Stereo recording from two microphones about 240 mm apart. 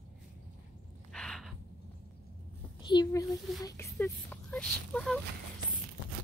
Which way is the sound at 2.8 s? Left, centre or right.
Centre.